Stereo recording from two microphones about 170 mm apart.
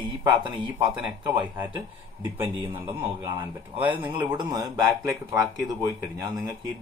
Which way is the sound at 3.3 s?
30° right (ahead or behind).